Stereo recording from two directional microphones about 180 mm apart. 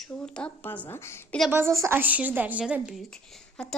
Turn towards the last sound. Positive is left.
turn(degrees=5)  # may be behind; listen again after turning